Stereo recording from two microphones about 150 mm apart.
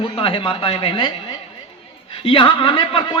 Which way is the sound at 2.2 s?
35° left (ahead or behind).